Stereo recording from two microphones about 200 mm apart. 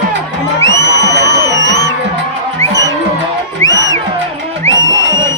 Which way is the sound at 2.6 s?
15° left (ahead or behind).